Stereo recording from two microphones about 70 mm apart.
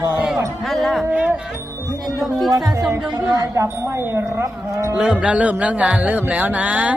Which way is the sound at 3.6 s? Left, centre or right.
Right.